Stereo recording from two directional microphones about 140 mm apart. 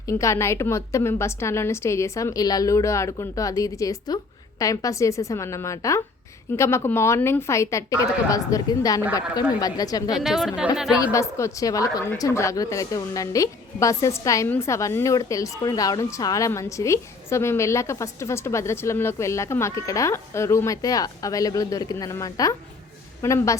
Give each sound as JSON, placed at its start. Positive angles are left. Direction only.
{"t": 0.1, "sound": "a woman's voice", "side_deg": 20}
{"t": 10.2, "sound": "a woman's voice", "side_deg": 0}
{"t": 11.0, "sound": "a woman's voice", "side_deg": 20}